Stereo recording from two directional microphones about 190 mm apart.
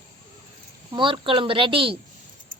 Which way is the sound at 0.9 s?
25° right (ahead or behind).